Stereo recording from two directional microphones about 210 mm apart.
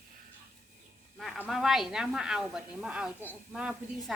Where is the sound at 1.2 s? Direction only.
5° right (ahead or behind).